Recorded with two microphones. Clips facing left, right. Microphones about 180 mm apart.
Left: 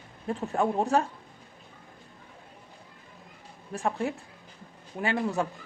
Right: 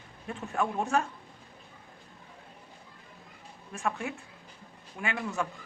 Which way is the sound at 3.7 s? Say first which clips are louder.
Left 4 dB; 35° left (ahead or behind).